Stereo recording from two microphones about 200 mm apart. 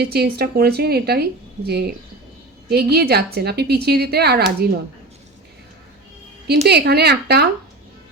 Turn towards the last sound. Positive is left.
turn(degrees=-55)  # may be behind; listen again after turning